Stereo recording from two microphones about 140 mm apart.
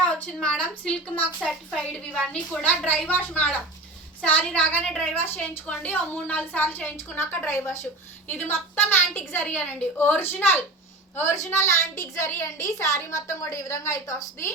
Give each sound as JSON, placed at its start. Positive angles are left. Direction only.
{"t": 0.0, "sound": "a woman's voice", "side_deg": 5}